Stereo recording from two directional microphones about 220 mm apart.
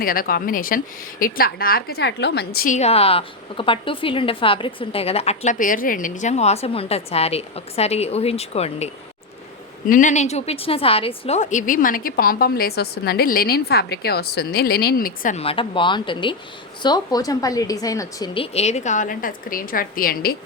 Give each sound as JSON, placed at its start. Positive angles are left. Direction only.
{"t": 0.0, "sound": "a woman's voice", "side_deg": 40}
{"t": 18.5, "sound": "a woman's voice", "side_deg": 30}